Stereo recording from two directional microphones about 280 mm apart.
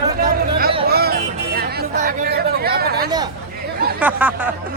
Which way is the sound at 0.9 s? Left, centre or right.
Right.